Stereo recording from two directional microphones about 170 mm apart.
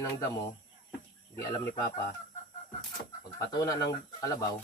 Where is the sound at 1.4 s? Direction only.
20° left (ahead or behind).